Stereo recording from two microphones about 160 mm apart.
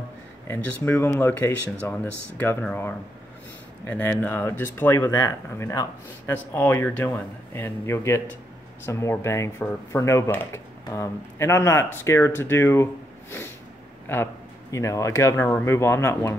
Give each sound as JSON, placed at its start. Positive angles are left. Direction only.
{"t": 0.5, "sound": "speech", "side_deg": 15}
{"t": 14.0, "sound": "speech", "side_deg": 15}